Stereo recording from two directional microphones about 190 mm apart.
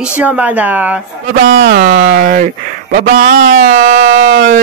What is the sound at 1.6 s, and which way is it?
Speech, 50° right (ahead or behind).